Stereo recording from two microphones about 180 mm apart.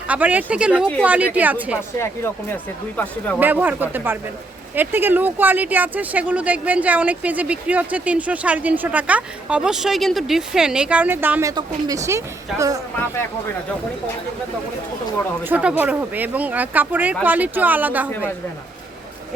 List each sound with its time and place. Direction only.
0.1 s speech: 10° right (ahead or behind)
2.0 s speech: 15° left (ahead or behind)
3.3 s speech: 10° right (ahead or behind)
15.4 s speech: 10° right (ahead or behind)